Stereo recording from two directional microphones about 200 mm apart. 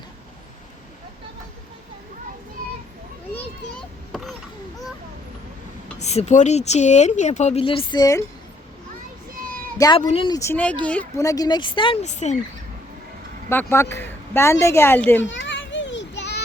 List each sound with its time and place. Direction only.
4.1 s a sound: centre (ahead or behind)
6.0 s speech: 35° left (ahead or behind)
9.3 s children playing: 45° right (ahead or behind)
9.7 s a woman's voice: 20° left (ahead or behind); by 12.4 s 35° left (ahead or behind)
13.5 s speech: 10° left (ahead or behind)
15.2 s children playing: 65° left (ahead or behind)